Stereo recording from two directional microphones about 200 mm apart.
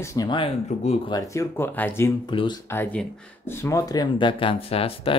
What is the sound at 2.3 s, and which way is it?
Speech, 25° left (ahead or behind).